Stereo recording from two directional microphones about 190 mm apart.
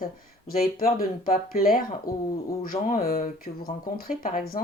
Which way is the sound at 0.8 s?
50° left (ahead or behind).